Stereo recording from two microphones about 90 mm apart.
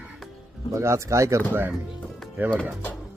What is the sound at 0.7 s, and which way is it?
Speech, 35° right (ahead or behind).